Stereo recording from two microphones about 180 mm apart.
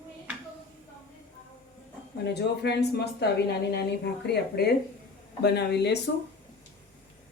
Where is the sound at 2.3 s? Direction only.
65° left (ahead or behind).